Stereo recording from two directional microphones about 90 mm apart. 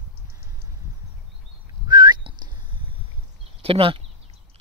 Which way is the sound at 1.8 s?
55° right (ahead or behind).